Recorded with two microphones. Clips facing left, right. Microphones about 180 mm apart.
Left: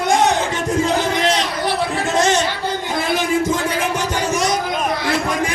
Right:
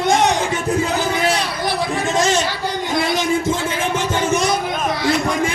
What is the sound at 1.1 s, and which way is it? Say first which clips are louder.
Chatter: left 1 dB; 10° right (ahead or behind).